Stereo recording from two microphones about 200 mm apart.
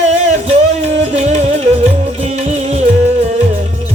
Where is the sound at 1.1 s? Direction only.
35° right (ahead or behind).